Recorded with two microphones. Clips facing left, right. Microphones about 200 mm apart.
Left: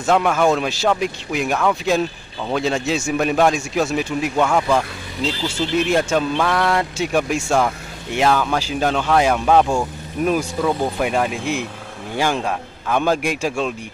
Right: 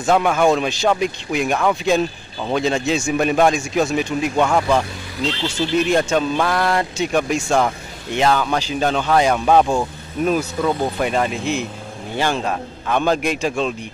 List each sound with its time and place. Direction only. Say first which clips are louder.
0.0 s speech: right 1 dB; centre (ahead or behind)
6.3 s a man's voice: even; 5° right (ahead or behind)